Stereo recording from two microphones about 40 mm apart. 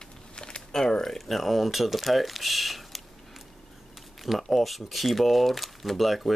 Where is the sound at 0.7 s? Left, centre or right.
Centre.